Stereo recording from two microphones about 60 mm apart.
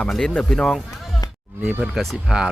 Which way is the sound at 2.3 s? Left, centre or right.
Centre.